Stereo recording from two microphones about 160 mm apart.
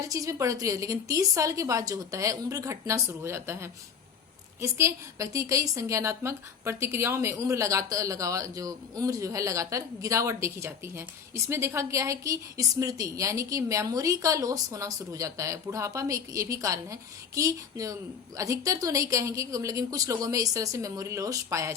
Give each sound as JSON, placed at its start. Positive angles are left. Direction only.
{"t": 0.1, "sound": "a woman's voice", "side_deg": -20}